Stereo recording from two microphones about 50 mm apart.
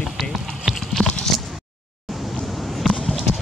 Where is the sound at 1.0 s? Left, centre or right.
Centre.